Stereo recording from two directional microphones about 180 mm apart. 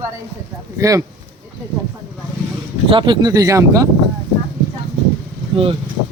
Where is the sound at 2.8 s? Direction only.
25° right (ahead or behind).